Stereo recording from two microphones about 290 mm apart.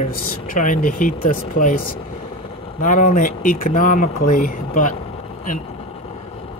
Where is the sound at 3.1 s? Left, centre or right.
Left.